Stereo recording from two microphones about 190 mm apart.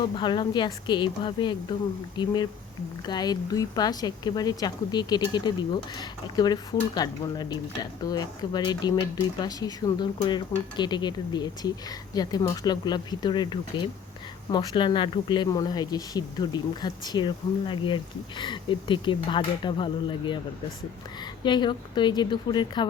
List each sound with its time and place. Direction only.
0.2 s speech: 25° left (ahead or behind)
21.4 s speech: 25° left (ahead or behind)